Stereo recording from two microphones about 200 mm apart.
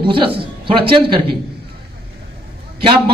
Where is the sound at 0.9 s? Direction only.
25° right (ahead or behind).